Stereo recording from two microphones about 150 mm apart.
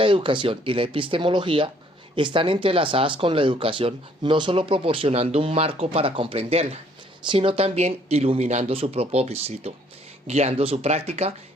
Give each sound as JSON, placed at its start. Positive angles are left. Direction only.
{"t": 0.0, "sound": "speech", "side_deg": -35}